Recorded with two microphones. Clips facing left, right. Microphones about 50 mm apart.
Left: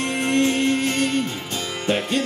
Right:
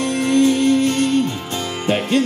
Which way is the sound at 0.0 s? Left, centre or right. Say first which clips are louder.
Right 5 dB; left.